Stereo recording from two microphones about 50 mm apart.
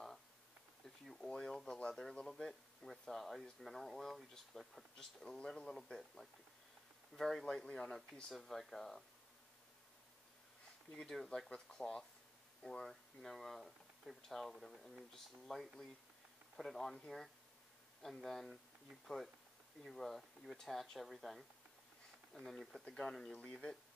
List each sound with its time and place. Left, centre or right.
1.1 s speech: centre
11.0 s speech: centre
22.8 s speech: centre